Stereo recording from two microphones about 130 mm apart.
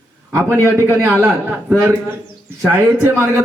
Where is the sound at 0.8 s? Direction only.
20° right (ahead or behind).